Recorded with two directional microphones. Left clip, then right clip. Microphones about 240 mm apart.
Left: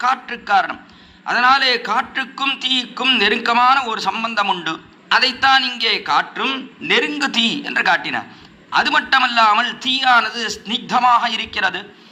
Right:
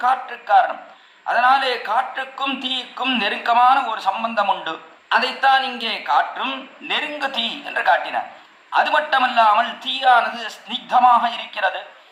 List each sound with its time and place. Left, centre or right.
0.0 s a man's voice: left